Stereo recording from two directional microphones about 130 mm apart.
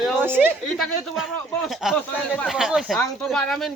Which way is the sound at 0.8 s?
Centre (ahead or behind).